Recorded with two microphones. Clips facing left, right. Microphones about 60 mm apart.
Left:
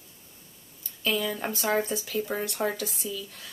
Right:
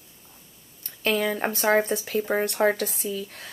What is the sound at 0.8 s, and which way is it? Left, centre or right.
Speech, right.